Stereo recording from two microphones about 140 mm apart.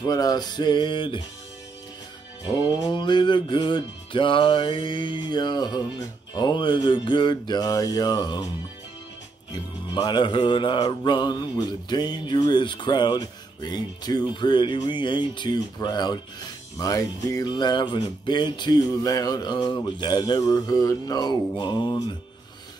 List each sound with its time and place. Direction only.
0.0 s music: 30° left (ahead or behind)
2.4 s music: 30° left (ahead or behind)
9.5 s music: 30° left (ahead or behind)